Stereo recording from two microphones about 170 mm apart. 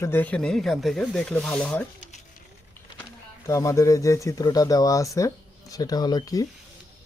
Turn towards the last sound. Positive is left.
turn(degrees=20)  # may be behind; listen again after turning